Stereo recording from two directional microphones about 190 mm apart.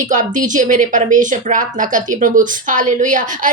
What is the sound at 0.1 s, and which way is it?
Speech, 40° right (ahead or behind).